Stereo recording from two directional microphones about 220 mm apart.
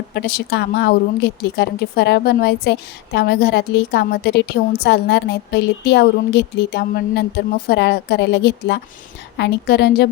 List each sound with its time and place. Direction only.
0.1 s speech: 50° left (ahead or behind)